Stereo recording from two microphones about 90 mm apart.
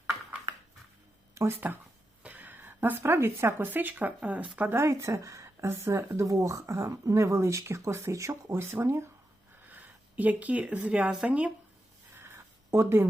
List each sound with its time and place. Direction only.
1.4 s a woman's voice: 25° right (ahead or behind)
4.8 s speech: 35° right (ahead or behind)
9.6 s speech: 20° right (ahead or behind)
12.1 s a sound: 25° right (ahead or behind)